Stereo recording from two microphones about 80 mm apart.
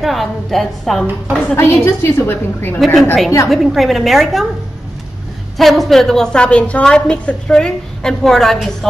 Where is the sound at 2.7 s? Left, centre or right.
Centre.